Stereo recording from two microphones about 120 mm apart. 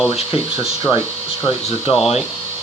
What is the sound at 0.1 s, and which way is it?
Speech, 50° left (ahead or behind).